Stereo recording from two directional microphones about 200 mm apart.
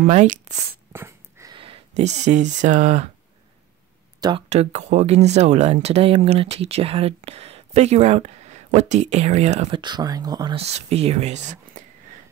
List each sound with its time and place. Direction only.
0.0 s speech: 35° right (ahead or behind)
0.9 s wheeze: 15° right (ahead or behind)
1.5 s speech: 25° right (ahead or behind)
4.2 s speech: 30° right (ahead or behind)